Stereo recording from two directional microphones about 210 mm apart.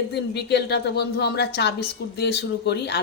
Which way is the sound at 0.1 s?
55° left (ahead or behind).